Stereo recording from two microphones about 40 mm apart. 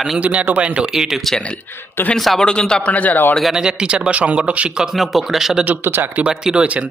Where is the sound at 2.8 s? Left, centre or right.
Left.